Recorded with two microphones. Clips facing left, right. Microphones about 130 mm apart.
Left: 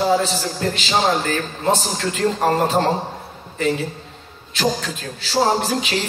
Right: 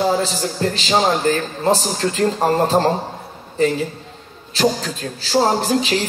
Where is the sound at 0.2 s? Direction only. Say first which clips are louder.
Right 2 dB; 35° right (ahead or behind).